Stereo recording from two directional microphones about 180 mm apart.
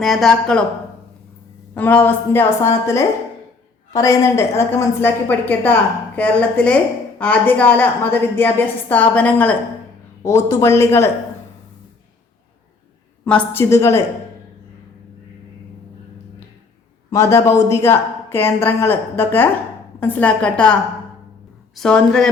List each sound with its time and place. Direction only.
0.0 s speech: centre (ahead or behind)
1.7 s a woman's voice: 10° left (ahead or behind)
13.2 s a woman's voice: 10° left (ahead or behind)
17.1 s a woman's voice: 15° left (ahead or behind)
21.8 s speech: 5° left (ahead or behind)